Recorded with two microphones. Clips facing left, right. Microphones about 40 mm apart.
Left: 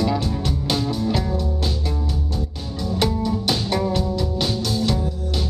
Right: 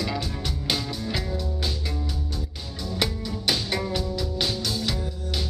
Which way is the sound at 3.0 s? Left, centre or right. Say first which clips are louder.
Left 6 dB; centre.